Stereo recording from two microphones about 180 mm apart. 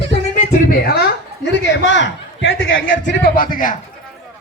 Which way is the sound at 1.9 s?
85° left.